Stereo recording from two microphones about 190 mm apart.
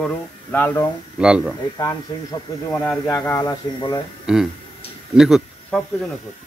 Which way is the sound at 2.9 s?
10° left (ahead or behind).